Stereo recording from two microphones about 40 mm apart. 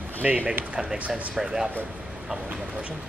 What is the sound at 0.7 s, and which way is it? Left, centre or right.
Speech, right.